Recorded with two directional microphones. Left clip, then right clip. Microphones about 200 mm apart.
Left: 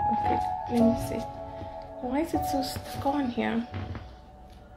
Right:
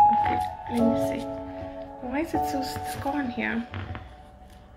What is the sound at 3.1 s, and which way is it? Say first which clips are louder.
Speech: left 2 dB; 15° left (ahead or behind).